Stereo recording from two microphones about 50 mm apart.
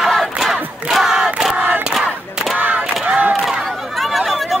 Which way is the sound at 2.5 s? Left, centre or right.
Right.